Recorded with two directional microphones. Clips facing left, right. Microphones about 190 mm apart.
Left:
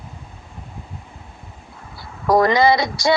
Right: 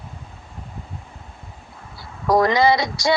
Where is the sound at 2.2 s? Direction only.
55° left (ahead or behind).